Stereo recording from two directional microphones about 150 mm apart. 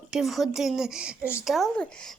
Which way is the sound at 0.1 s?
Centre (ahead or behind).